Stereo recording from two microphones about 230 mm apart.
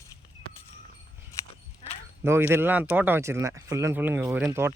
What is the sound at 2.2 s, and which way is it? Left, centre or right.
Speech, centre.